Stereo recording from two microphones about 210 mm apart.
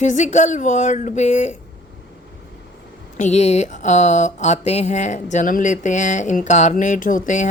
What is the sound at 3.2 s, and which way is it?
Speech, 30° left (ahead or behind).